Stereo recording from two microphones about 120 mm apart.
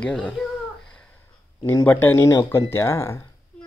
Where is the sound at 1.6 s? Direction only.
15° left (ahead or behind).